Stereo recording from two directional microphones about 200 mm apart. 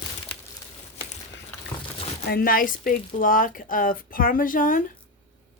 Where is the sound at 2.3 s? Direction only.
45° left (ahead or behind).